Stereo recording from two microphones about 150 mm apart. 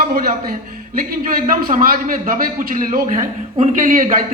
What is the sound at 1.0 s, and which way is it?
A man's voice, 70° right (ahead or behind).